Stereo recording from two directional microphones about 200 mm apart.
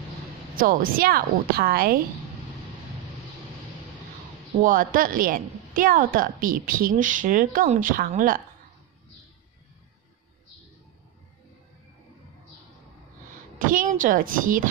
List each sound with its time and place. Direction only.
0.6 s a woman's voice: 45° right (ahead or behind)
4.6 s a woman's voice: 40° right (ahead or behind)
13.6 s a woman's voice: 40° right (ahead or behind)